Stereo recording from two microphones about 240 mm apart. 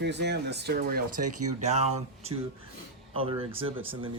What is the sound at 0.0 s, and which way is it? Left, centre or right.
Speech, right.